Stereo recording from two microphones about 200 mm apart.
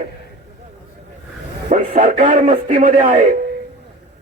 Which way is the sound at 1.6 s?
40° right (ahead or behind).